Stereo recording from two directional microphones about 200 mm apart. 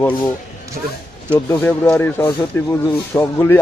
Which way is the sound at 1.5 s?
10° left (ahead or behind).